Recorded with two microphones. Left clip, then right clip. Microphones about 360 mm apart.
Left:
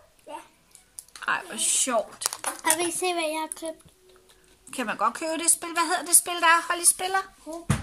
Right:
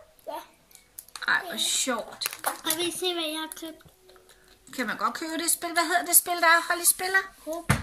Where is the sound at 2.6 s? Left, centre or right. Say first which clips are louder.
Left 3 dB; centre.